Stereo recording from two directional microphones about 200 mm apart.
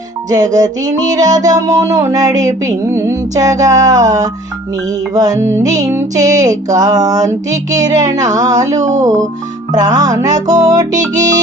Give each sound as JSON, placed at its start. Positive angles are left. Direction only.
{"t": 0.3, "sound": "music", "side_deg": -20}
{"t": 8.8, "sound": "speech", "side_deg": -35}
{"t": 9.7, "sound": "music", "side_deg": -20}